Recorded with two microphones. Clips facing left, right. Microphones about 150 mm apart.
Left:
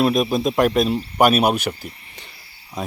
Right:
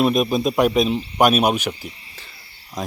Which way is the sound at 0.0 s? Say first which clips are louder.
Even; centre (ahead or behind).